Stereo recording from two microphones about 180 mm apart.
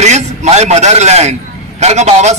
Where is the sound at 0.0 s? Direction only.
40° right (ahead or behind).